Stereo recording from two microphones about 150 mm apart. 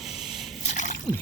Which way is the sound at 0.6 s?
55° left (ahead or behind).